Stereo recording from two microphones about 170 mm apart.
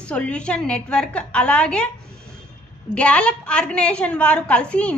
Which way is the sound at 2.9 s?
5° left (ahead or behind).